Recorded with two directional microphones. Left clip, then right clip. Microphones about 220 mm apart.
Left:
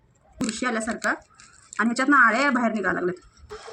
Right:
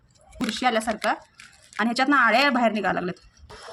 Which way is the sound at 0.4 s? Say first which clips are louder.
Right 4 dB; 40° right (ahead or behind).